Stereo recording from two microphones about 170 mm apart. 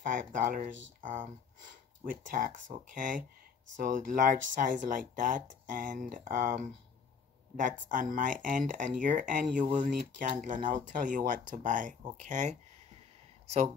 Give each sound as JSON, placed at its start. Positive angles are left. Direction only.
{"t": 0.0, "sound": "speech", "side_deg": -50}
{"t": 7.9, "sound": "speech", "side_deg": -50}